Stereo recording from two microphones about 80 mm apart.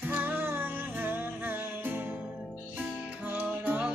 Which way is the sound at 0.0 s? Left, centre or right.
Right.